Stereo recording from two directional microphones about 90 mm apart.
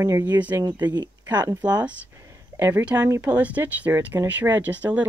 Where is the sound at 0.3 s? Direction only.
20° right (ahead or behind).